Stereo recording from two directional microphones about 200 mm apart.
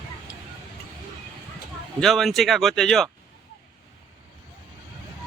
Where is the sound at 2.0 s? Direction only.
Centre (ahead or behind).